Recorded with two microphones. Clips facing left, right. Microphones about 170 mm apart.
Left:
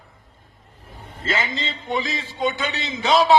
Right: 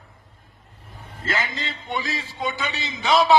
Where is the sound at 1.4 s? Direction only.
Centre (ahead or behind).